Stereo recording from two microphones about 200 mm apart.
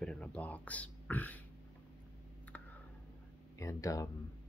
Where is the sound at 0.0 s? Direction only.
5° left (ahead or behind).